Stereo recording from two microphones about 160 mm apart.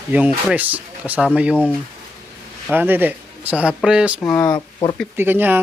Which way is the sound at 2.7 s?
10° right (ahead or behind).